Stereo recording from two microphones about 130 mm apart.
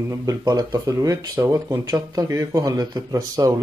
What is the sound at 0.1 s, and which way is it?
Speech, 25° right (ahead or behind).